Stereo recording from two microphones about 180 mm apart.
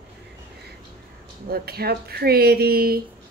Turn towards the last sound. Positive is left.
turn(degrees=-55)  # may be behind; listen again after turning